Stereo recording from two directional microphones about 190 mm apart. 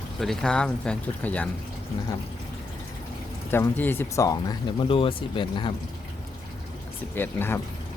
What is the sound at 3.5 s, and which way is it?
Speech, 10° left (ahead or behind).